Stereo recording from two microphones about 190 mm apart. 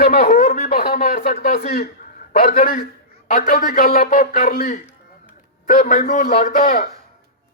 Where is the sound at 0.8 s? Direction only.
55° left (ahead or behind).